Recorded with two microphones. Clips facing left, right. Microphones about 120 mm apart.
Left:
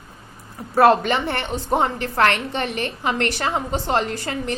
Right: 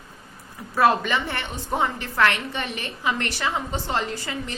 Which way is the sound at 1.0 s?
55° left (ahead or behind).